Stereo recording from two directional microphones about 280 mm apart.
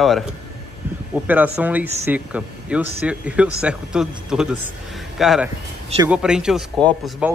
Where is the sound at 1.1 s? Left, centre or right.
Centre.